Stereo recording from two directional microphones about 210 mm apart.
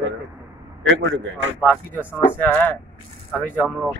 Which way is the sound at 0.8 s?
60° right (ahead or behind).